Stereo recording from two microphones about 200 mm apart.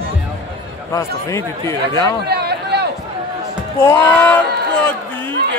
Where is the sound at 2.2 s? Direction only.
55° right (ahead or behind).